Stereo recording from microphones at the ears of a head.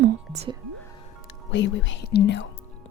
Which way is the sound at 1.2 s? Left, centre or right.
Left.